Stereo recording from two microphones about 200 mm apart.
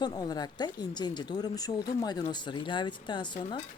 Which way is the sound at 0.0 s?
20° left (ahead or behind).